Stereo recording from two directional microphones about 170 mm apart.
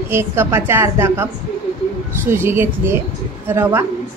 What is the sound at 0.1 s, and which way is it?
A woman's voice, 15° right (ahead or behind).